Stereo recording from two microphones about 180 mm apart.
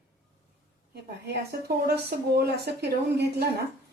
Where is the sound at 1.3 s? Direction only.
65° right (ahead or behind).